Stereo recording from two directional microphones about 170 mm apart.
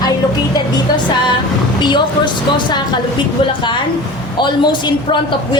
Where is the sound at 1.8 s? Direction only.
25° left (ahead or behind).